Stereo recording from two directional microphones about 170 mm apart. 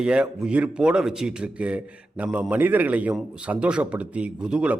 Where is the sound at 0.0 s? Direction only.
5° right (ahead or behind).